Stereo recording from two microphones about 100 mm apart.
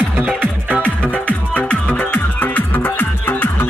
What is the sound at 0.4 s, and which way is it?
Music, 15° right (ahead or behind).